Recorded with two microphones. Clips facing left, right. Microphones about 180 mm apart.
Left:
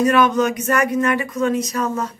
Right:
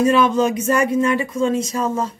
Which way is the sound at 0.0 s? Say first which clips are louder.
Right 1 dB; 25° right (ahead or behind).